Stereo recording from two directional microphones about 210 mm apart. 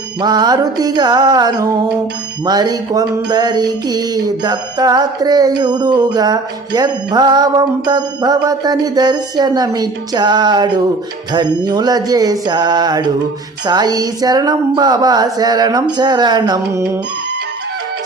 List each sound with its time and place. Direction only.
0.2 s music: 20° right (ahead or behind)